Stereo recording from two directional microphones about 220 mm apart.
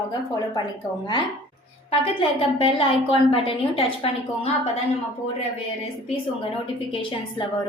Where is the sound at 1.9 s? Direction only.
25° left (ahead or behind).